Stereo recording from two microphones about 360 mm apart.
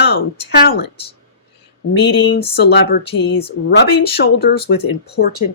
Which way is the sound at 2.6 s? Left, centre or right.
Left.